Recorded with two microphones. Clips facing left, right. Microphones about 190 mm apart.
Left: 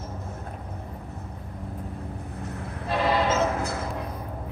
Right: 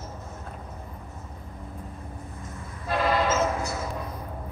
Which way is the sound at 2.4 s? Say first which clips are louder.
Left 5 dB; 65° left (ahead or behind).